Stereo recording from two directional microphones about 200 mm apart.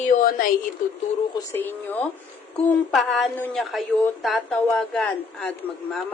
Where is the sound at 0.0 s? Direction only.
40° left (ahead or behind).